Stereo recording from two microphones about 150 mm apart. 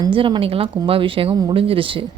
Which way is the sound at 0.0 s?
35° right (ahead or behind).